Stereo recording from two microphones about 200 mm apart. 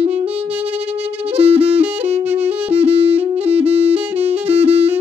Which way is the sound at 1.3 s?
30° right (ahead or behind).